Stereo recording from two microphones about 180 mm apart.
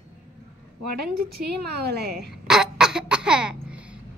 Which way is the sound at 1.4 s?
65° right (ahead or behind).